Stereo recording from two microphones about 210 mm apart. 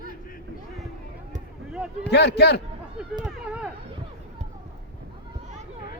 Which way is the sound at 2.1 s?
55° left (ahead or behind).